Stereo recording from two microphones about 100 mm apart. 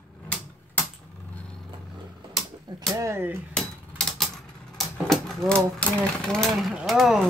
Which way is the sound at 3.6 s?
5° left (ahead or behind).